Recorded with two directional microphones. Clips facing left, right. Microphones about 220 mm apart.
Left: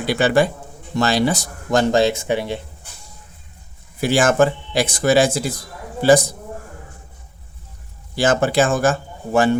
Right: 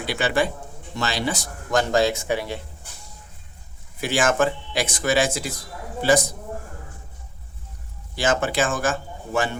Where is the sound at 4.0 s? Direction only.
35° left (ahead or behind).